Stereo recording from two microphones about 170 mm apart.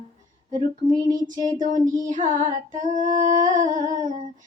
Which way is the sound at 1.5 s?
50° right (ahead or behind).